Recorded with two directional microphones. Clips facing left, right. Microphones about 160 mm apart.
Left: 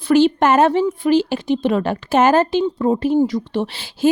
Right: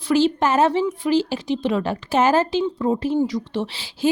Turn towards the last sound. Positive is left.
turn(degrees=55)  # may be behind; listen again after turning